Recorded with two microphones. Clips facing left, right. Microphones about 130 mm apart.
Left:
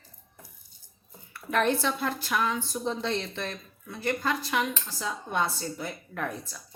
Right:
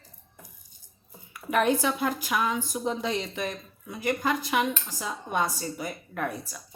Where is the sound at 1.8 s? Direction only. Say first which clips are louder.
Right 2 dB; 10° right (ahead or behind).